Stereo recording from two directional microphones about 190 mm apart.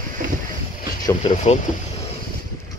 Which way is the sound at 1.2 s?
30° left (ahead or behind).